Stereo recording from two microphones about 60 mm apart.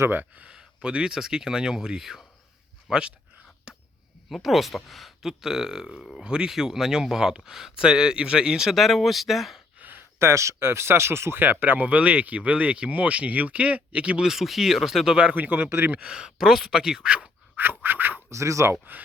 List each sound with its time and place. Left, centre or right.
0.1 s speech: right
0.5 s speech: centre
3.7 s a sound: centre
4.3 s speech: centre
9.7 s a sound: right
10.2 s speech: right; by 14.3 s centre
14.3 s speech: centre
15.4 s speech: right
15.9 s speech: centre
17.6 s a sound: right
18.3 s speech: right
18.7 s speech: right